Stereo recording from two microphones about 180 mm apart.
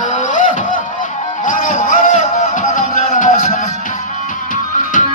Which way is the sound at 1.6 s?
50° left (ahead or behind).